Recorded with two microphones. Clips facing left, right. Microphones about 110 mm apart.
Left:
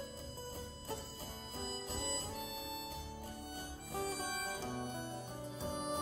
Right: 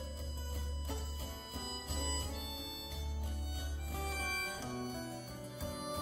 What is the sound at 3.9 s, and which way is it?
Music, 35° left (ahead or behind).